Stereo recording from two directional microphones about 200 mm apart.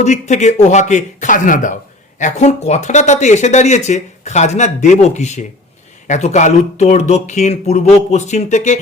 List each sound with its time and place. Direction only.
0.0 s speech: 35° left (ahead or behind)